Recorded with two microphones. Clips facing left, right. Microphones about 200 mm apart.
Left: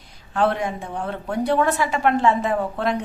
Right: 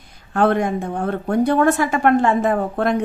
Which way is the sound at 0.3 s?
50° right (ahead or behind).